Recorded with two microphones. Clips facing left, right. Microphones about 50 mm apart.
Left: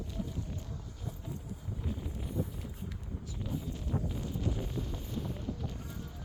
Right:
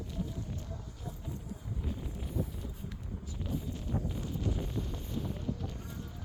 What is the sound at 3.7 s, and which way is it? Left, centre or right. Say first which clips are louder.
Wind noise: even; centre.